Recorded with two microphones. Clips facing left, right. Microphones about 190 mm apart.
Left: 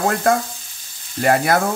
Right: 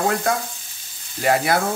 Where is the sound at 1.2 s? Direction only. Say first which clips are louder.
Left 2 dB; 50° left (ahead or behind).